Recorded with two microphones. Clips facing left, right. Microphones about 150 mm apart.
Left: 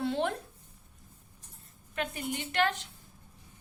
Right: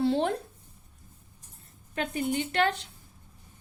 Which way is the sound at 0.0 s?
35° right (ahead or behind).